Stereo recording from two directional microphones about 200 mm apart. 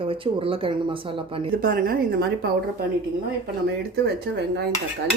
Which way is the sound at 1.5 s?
45° right (ahead or behind).